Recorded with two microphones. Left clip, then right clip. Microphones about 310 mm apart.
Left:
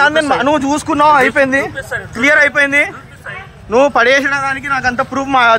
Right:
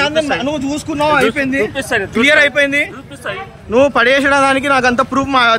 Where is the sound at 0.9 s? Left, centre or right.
Left.